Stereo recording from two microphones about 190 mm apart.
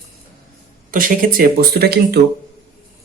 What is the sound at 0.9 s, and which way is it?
Speech, 45° right (ahead or behind).